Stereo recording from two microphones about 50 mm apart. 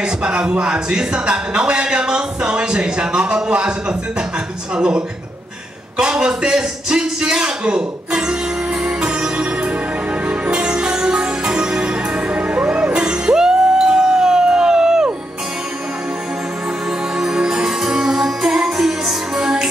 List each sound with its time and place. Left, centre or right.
0.0 s a man's voice: centre
4.7 s a man's voice: centre
8.8 s music: right
17.2 s music: centre